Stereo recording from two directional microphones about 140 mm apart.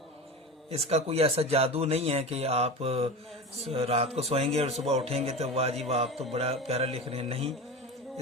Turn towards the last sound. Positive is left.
turn(degrees=-45)  # may be behind; listen again after turning